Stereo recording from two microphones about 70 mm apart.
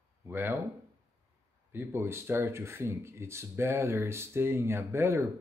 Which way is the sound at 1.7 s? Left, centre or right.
Right.